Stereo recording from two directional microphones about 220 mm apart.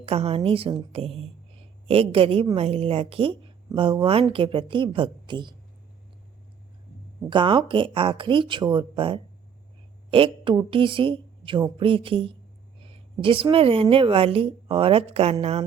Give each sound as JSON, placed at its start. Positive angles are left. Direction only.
{"t": 0.0, "sound": "a woman's voice", "side_deg": -25}
{"t": 7.3, "sound": "a woman's voice", "side_deg": -20}